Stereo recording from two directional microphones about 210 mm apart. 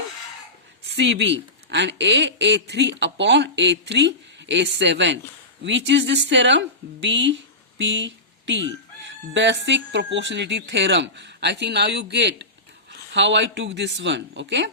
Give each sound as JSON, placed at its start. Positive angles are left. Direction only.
{"t": 0.9, "sound": "speech", "side_deg": -60}